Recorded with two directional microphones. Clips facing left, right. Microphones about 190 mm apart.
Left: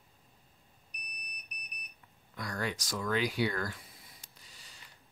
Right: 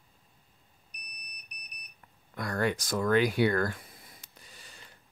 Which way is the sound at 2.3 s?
55° right (ahead or behind).